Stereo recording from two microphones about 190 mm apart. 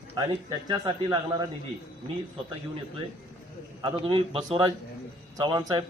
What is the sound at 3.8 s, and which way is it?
A man's voice, 30° right (ahead or behind).